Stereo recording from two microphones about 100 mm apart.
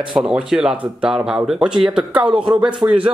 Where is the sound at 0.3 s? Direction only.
10° right (ahead or behind).